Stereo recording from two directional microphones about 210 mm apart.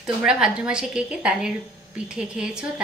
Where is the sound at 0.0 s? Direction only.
5° right (ahead or behind).